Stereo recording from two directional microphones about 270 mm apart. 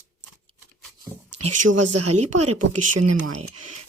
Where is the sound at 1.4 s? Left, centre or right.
Right.